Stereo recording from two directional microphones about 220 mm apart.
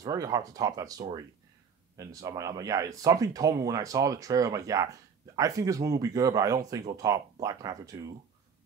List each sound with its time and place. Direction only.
0.0 s speech: 15° right (ahead or behind)